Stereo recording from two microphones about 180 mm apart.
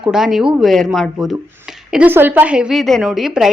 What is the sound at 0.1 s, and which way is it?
A woman's voice, 5° right (ahead or behind).